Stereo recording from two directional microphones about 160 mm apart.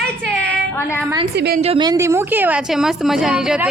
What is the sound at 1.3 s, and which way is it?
Speech, 90° right.